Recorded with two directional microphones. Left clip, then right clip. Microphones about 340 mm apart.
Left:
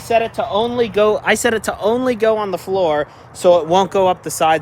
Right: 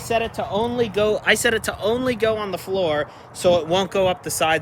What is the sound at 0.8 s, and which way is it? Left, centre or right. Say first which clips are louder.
Speech: left 4 dB; centre.